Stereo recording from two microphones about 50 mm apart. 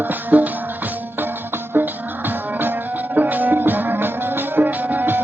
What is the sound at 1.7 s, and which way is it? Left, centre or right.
Music, right.